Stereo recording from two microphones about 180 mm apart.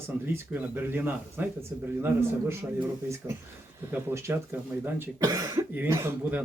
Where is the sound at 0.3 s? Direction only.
10° right (ahead or behind).